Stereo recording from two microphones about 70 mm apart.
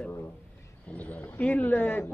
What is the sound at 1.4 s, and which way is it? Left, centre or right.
Speech, left.